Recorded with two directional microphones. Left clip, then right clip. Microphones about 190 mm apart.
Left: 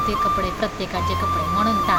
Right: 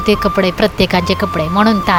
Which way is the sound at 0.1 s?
50° right (ahead or behind).